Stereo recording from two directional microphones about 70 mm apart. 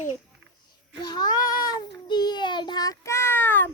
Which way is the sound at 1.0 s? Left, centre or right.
Left.